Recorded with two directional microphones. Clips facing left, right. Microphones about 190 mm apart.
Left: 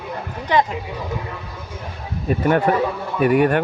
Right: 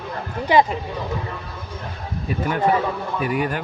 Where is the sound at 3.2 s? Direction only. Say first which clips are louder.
Left 9 dB; 60° left (ahead or behind).